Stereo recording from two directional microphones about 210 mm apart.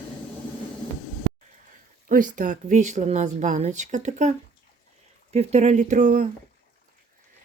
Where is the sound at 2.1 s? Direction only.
40° right (ahead or behind).